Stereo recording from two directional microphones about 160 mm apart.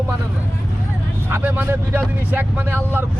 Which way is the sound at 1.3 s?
10° right (ahead or behind).